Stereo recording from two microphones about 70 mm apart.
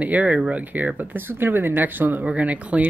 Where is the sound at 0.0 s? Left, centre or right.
Right.